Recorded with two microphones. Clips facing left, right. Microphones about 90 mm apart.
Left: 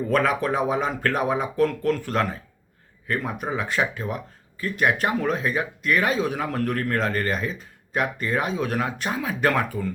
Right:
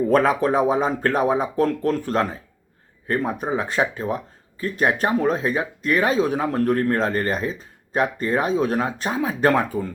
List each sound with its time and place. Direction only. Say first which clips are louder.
0.1 s speech: right 2 dB; 35° right (ahead or behind)